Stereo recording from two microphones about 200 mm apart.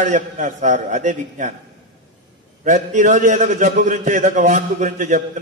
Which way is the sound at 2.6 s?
40° right (ahead or behind).